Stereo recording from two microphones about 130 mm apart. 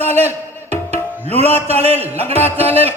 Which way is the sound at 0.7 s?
55° right (ahead or behind).